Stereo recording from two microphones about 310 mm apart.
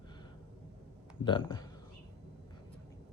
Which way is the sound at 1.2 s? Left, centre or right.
Centre.